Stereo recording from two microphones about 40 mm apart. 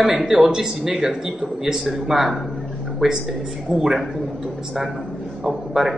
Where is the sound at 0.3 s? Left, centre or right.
Centre.